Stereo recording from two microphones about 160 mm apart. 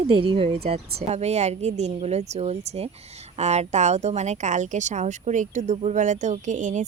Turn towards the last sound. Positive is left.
turn(degrees=-50)  # may be behind; listen again after turning